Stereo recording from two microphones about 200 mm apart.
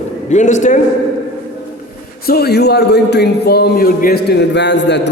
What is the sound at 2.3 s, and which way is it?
A man's voice, 55° left (ahead or behind).